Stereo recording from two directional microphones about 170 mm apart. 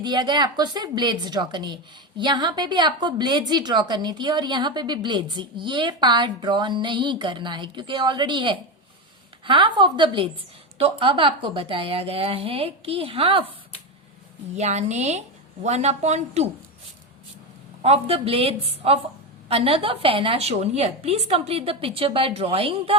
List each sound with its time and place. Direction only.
0.0 s a woman's voice: 25° right (ahead or behind)
14.5 s a woman's voice: 40° right (ahead or behind)
17.8 s a woman's voice: 35° right (ahead or behind)